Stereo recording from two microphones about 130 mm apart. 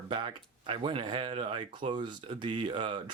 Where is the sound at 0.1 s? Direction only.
45° right (ahead or behind).